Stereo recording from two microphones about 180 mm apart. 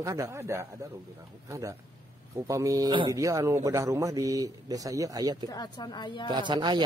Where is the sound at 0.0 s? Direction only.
15° right (ahead or behind).